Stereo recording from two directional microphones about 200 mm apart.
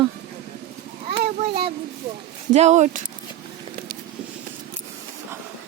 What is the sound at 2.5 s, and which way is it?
Speech, 35° right (ahead or behind).